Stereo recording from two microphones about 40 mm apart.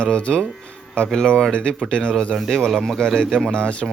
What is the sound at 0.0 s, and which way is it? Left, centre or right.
Speech, left.